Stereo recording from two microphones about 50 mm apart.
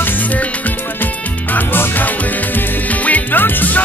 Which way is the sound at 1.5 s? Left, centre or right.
Left.